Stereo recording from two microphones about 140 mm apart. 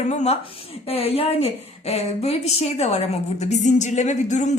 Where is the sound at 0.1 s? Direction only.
50° left (ahead or behind).